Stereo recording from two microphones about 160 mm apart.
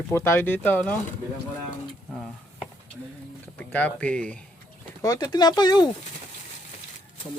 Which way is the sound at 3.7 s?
10° left (ahead or behind).